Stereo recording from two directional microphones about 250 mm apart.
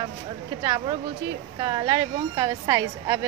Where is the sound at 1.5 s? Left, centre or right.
Centre.